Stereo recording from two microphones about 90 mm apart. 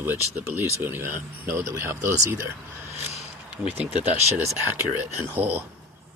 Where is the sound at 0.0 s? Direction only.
25° right (ahead or behind).